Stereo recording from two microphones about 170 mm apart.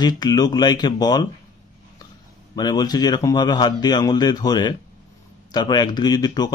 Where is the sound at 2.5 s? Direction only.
25° left (ahead or behind).